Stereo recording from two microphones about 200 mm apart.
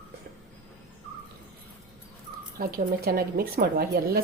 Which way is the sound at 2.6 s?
50° right (ahead or behind).